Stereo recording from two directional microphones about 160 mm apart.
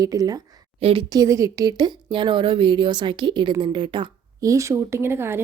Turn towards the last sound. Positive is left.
turn(degrees=-15)  # may be behind; listen again after turning